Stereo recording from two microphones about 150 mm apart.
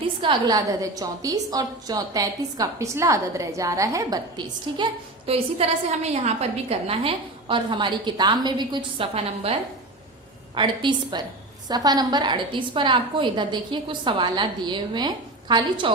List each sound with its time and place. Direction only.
0.2 s a woman's voice: 30° right (ahead or behind)